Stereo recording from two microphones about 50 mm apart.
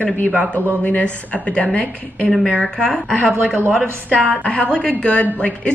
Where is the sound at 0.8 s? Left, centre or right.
Left.